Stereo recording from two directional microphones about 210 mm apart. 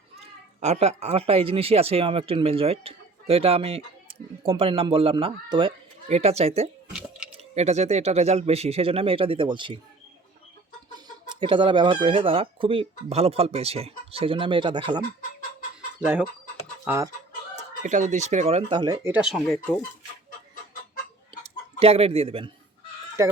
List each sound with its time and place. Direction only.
0.6 s speech: 30° right (ahead or behind)
10.9 s speech: 20° right (ahead or behind)
16.0 s speech: 5° right (ahead or behind)
17.8 s speech: 35° right (ahead or behind); by 19.7 s centre (ahead or behind)
21.4 s speech: 30° right (ahead or behind)
23.2 s speech: 15° right (ahead or behind)